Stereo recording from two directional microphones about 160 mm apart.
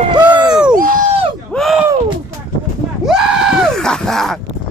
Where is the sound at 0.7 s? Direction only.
60° right (ahead or behind).